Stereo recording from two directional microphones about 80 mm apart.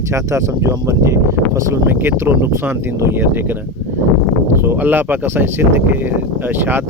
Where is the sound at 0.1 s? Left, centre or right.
Right.